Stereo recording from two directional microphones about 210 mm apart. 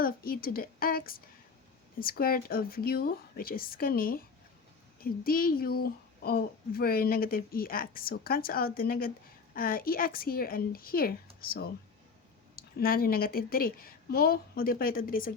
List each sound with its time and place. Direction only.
0.0 s a woman's voice: 45° left (ahead or behind)